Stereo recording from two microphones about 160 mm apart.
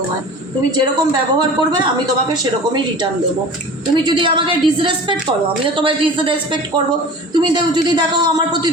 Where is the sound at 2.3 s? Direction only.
25° right (ahead or behind).